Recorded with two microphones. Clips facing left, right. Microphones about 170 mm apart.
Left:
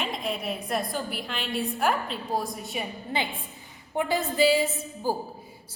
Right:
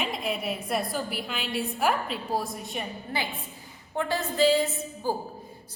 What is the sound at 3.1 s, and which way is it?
A woman's voice, 20° left (ahead or behind).